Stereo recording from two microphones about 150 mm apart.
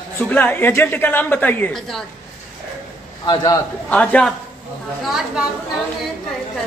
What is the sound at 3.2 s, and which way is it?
Speech, 30° left (ahead or behind).